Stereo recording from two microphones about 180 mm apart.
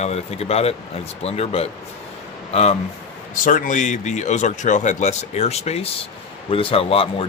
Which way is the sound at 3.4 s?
45° left (ahead or behind).